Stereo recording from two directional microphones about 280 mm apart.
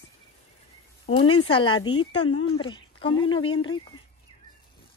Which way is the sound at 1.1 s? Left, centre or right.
Centre.